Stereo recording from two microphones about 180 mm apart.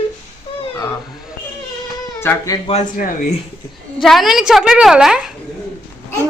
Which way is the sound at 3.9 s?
Centre (ahead or behind).